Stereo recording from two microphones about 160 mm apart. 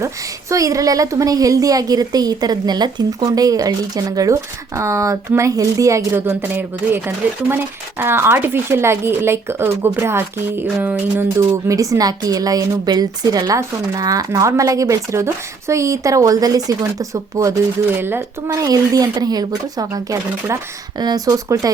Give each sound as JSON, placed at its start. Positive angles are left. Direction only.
{"t": 0.5, "sound": "a woman's voice", "side_deg": -20}